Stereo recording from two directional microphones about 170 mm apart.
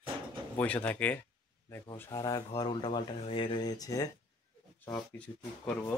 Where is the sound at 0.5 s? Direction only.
10° left (ahead or behind).